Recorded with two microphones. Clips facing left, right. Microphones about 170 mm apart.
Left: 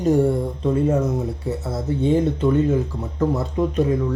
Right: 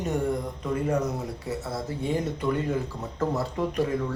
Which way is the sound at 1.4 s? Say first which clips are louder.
Left 6 dB; 25° left (ahead or behind).